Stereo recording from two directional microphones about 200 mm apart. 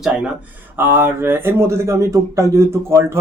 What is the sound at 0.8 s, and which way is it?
Speech, 10° right (ahead or behind).